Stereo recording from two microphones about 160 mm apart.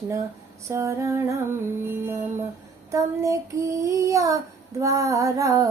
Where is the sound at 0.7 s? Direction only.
20° right (ahead or behind).